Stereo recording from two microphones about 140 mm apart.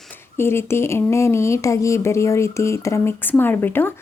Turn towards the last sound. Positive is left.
turn(degrees=15)  # may be behind; listen again after turning